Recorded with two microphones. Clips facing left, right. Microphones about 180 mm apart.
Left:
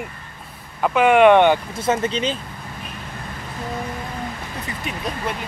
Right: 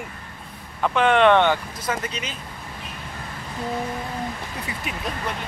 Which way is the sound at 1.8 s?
25° left (ahead or behind).